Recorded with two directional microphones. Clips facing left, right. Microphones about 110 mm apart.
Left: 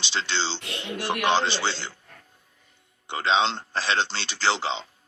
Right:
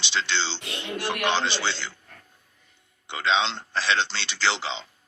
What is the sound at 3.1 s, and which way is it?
Speech, 40° left (ahead or behind).